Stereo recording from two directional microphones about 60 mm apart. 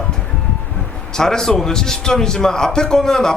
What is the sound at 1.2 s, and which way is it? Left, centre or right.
A man's voice, centre.